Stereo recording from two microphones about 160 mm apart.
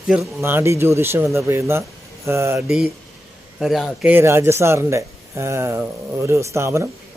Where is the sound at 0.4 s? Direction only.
15° right (ahead or behind).